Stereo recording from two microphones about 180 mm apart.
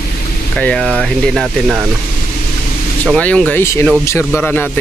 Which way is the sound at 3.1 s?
5° left (ahead or behind).